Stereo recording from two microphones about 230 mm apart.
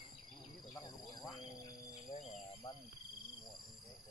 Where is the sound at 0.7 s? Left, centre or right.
Centre.